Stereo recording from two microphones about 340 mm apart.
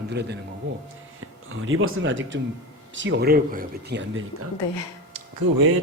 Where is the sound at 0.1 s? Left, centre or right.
Right.